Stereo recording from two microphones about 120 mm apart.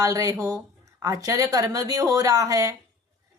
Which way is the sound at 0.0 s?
30° right (ahead or behind).